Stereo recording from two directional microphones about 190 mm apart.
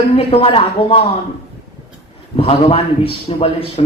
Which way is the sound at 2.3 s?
30° left (ahead or behind).